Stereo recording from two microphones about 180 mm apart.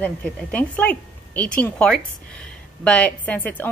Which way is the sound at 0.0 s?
10° left (ahead or behind).